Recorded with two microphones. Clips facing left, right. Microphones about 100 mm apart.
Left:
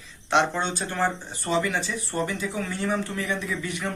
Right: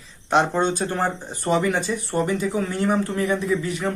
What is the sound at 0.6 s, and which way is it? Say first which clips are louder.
Speech: right 4 dB; 45° right (ahead or behind).